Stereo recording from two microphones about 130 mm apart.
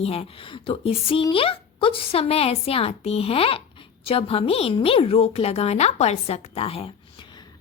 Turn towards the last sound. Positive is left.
turn(degrees=45)  # may be behind; listen again after turning